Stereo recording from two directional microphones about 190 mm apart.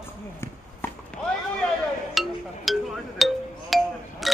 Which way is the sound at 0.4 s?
10° left (ahead or behind).